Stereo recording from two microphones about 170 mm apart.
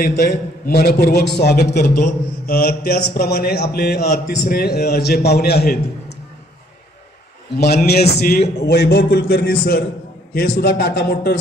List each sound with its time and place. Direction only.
0.0 s a man's voice: 70° left (ahead or behind)
7.5 s a man's voice: 70° left (ahead or behind)
10.6 s a man's voice: 85° left